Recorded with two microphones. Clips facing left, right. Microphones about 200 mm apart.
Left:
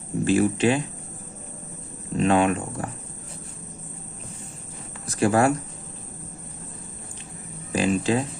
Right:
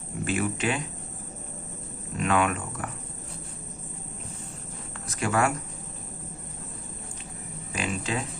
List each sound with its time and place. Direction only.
0.3 s speech: 30° left (ahead or behind)
2.1 s speech: 30° left (ahead or behind)
5.0 s speech: 35° left (ahead or behind)
7.7 s speech: 35° left (ahead or behind)